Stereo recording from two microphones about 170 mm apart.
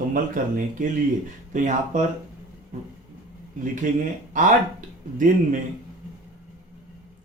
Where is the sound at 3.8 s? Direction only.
50° right (ahead or behind).